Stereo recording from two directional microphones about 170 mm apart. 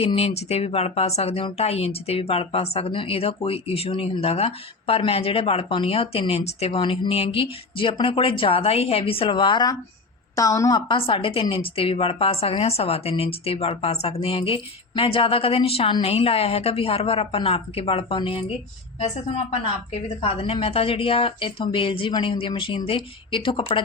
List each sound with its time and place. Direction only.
0.0 s speech: 35° left (ahead or behind)
19.9 s a woman's voice: 35° left (ahead or behind)